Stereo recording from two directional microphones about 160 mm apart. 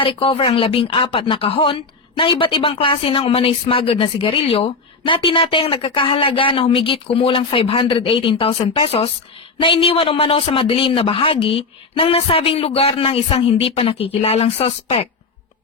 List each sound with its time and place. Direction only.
0.0 s speech: 35° left (ahead or behind)